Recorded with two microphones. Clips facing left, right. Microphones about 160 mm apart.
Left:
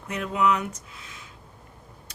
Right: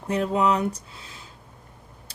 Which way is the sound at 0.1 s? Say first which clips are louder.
Right 2 dB; 30° right (ahead or behind).